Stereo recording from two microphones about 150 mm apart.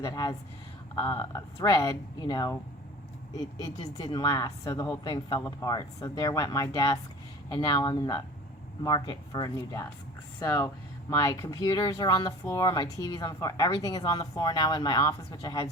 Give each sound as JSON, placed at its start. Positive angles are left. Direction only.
{"t": 0.0, "sound": "speech", "side_deg": 25}